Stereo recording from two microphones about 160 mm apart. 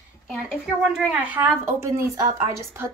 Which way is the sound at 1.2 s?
10° right (ahead or behind).